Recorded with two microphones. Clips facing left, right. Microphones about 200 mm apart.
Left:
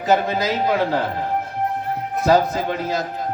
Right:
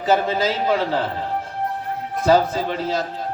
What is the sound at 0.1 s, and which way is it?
Speech, 15° left (ahead or behind).